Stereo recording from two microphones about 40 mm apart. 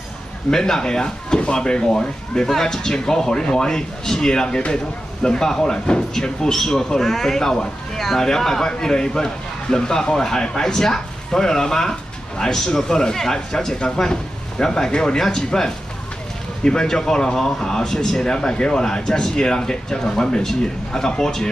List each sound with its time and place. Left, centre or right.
0.5 s speech: centre